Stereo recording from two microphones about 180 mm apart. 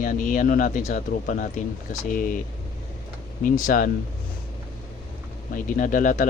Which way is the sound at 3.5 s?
50° left (ahead or behind).